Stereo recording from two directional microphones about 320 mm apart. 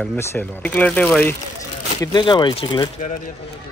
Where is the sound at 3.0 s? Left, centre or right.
Left.